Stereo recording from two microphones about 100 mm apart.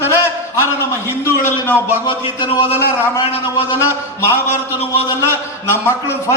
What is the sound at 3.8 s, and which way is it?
Speech, 25° left (ahead or behind).